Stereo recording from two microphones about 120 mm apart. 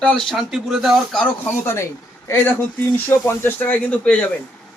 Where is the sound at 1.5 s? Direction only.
20° left (ahead or behind).